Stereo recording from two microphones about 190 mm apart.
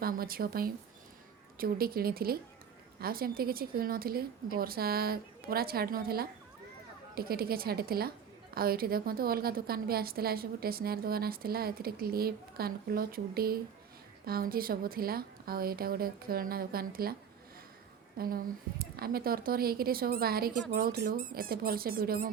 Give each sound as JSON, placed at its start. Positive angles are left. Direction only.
{"t": 0.0, "sound": "a woman's voice", "side_deg": -50}
{"t": 18.2, "sound": "a woman's voice", "side_deg": -50}